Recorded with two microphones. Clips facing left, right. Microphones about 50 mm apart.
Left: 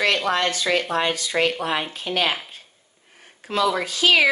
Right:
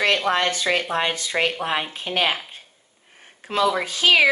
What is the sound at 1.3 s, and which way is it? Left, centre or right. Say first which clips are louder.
A woman's voice: left 1 dB; centre.